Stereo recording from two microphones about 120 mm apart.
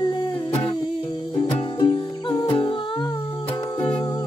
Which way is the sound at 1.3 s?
40° left (ahead or behind).